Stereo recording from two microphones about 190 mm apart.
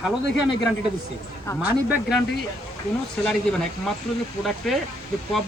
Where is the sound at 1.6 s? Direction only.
10° right (ahead or behind).